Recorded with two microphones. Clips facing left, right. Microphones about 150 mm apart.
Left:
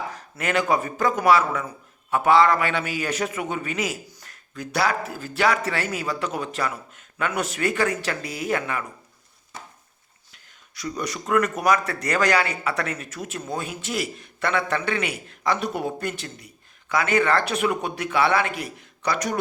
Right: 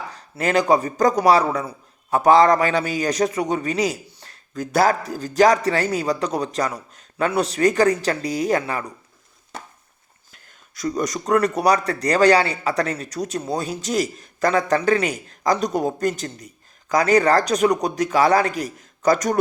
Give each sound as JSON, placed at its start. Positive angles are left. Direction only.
{"t": 0.1, "sound": "a man's voice", "side_deg": -35}
{"t": 10.3, "sound": "a man's voice", "side_deg": -45}